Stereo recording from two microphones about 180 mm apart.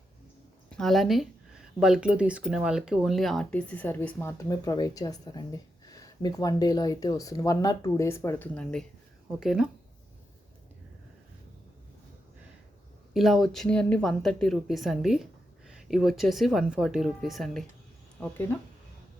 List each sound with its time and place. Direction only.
0.7 s speech: centre (ahead or behind)
9.4 s a woman's voice: centre (ahead or behind)
13.1 s a woman's voice: centre (ahead or behind)